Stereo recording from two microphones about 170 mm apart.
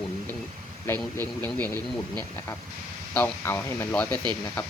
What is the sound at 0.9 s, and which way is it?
Speech, 15° left (ahead or behind).